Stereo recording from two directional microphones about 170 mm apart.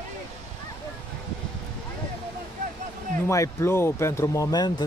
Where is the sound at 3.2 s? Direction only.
15° left (ahead or behind).